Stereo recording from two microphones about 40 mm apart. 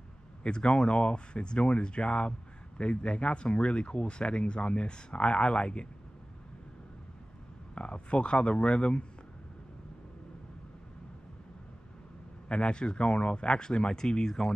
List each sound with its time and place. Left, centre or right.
0.4 s speech: left
7.7 s speech: left
12.4 s speech: left